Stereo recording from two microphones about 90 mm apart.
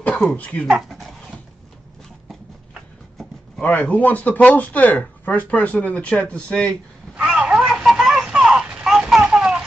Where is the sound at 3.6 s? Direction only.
15° left (ahead or behind).